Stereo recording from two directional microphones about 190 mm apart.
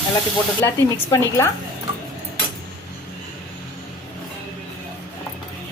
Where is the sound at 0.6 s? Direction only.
15° left (ahead or behind).